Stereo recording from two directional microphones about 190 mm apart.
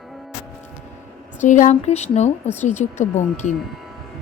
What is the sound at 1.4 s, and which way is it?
A woman's voice, 40° left (ahead or behind).